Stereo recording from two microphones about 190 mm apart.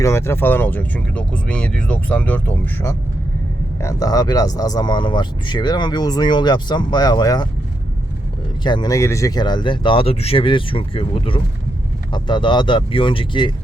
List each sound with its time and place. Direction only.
0.0 s speech: 15° left (ahead or behind)
8.6 s speech: 20° left (ahead or behind)